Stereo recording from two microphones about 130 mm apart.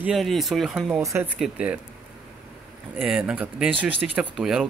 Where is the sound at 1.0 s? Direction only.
25° right (ahead or behind).